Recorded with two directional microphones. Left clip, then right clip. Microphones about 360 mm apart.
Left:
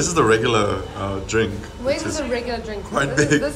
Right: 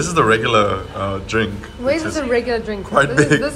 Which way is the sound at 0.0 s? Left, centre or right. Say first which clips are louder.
Right 2 dB; centre.